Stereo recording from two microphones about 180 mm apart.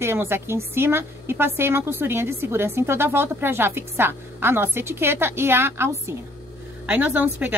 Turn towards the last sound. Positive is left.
turn(degrees=-10)  # may be behind; listen again after turning